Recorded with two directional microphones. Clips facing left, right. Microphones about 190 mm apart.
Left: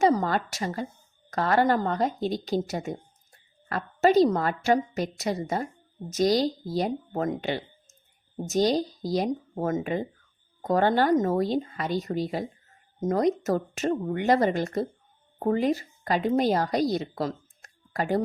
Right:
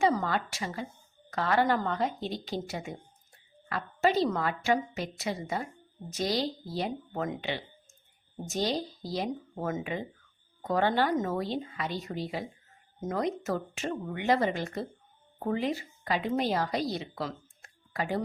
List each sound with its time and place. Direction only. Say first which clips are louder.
0.0 s a woman's voice: left 4 dB; 40° left (ahead or behind)